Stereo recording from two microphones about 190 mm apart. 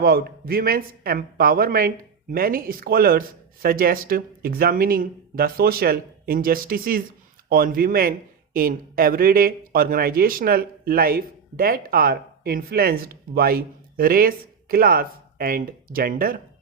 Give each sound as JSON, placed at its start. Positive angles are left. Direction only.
{"t": 0.0, "sound": "speech", "side_deg": -55}